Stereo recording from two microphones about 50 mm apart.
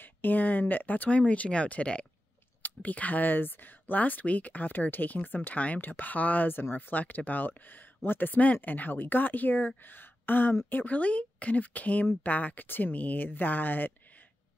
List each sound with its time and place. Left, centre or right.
0.0 s speech: left